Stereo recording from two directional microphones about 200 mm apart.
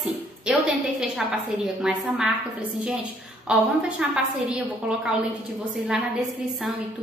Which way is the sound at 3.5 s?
5° right (ahead or behind).